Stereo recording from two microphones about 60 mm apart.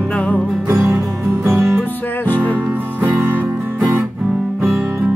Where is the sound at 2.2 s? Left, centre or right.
Left.